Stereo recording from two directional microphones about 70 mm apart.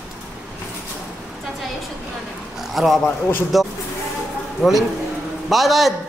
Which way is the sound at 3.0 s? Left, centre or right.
Left.